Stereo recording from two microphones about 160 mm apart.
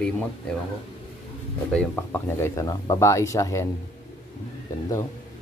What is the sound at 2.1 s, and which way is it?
Speech, 15° left (ahead or behind).